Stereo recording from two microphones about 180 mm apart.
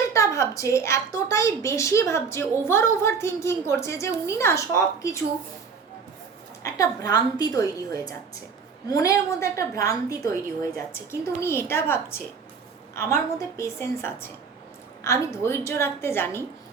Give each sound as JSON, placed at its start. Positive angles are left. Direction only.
{"t": 0.1, "sound": "a woman's voice", "side_deg": 15}
{"t": 6.6, "sound": "a woman's voice", "side_deg": 20}